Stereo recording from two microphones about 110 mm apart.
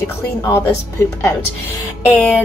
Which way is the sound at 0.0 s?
25° left (ahead or behind).